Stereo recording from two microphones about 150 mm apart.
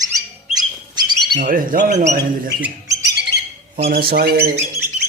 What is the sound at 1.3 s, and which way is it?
Speech, 65° right (ahead or behind).